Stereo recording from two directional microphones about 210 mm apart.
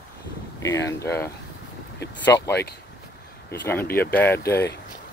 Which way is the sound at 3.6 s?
10° left (ahead or behind).